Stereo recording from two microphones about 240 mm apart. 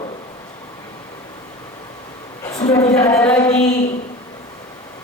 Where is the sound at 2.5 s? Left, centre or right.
Centre.